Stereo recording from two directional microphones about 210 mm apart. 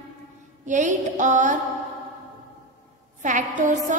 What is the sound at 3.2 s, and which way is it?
Speech, 35° right (ahead or behind).